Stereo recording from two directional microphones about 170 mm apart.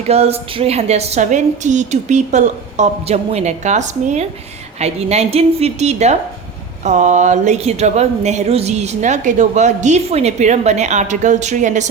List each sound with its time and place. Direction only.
0.1 s a woman's voice: 35° right (ahead or behind)